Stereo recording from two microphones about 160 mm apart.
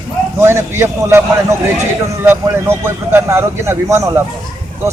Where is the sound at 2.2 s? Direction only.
15° right (ahead or behind).